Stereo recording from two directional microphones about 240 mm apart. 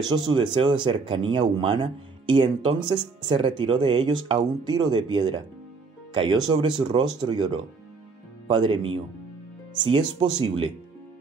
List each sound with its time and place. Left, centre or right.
0.1 s speech: centre